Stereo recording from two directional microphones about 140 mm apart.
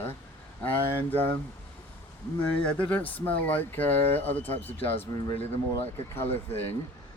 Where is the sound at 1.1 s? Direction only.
15° left (ahead or behind).